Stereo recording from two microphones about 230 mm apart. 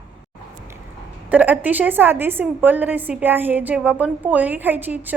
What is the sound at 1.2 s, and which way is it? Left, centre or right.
A woman's voice, centre.